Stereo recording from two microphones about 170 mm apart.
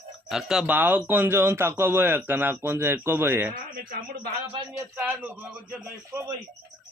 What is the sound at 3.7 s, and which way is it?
Speech, 60° right (ahead or behind).